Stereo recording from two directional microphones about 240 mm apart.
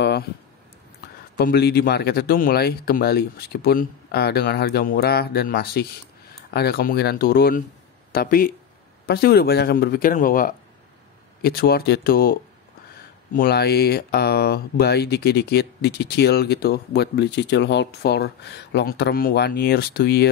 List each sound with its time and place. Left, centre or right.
1.3 s speech: left